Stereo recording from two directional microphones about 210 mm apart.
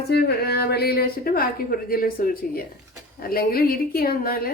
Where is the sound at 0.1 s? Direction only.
50° left (ahead or behind).